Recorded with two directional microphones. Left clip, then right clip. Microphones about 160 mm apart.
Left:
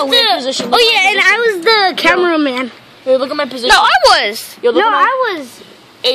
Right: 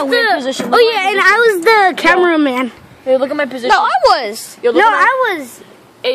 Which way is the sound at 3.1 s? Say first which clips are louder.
Even; 55° left (ahead or behind).